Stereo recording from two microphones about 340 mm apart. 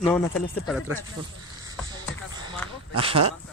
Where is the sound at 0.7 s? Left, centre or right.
Centre.